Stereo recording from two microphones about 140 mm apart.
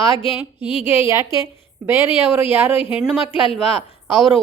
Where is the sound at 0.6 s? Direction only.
15° right (ahead or behind).